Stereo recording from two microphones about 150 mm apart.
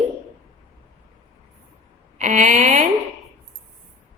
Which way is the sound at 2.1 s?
55° right (ahead or behind).